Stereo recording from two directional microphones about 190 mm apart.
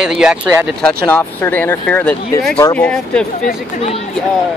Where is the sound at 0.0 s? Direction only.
5° right (ahead or behind).